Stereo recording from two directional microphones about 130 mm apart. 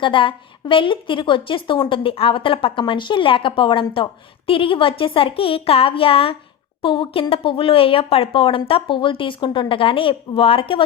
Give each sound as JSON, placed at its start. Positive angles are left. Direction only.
{"t": 0.0, "sound": "a woman's voice", "side_deg": 40}